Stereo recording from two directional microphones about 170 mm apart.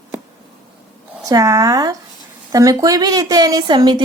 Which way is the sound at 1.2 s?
20° right (ahead or behind).